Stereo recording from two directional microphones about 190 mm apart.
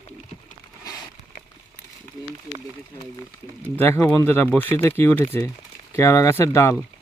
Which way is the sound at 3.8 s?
10° left (ahead or behind).